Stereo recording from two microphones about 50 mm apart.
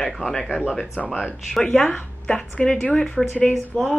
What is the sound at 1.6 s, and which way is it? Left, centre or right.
Speech, left.